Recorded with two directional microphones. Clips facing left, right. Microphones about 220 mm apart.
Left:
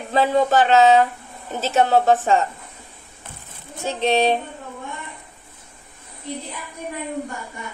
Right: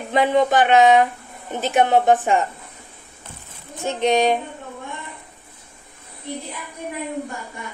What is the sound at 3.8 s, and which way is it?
Speech, 15° right (ahead or behind).